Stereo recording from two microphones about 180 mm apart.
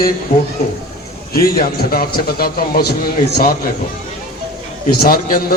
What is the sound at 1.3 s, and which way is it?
A man's voice, 55° left (ahead or behind).